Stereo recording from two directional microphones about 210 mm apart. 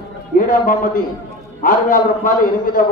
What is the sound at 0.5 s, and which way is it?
A man's voice, 40° left (ahead or behind).